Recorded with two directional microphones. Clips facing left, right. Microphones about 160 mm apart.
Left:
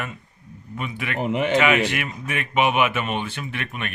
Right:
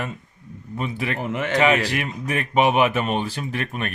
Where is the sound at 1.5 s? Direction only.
35° right (ahead or behind).